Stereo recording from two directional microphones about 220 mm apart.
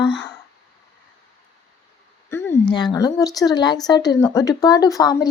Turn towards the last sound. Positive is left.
turn(degrees=15)  # may be behind; listen again after turning